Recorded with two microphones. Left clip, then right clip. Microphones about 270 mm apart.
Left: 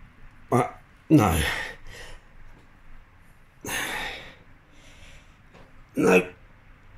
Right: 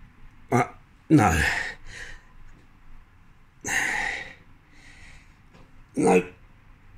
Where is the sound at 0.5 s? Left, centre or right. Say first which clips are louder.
Even; right.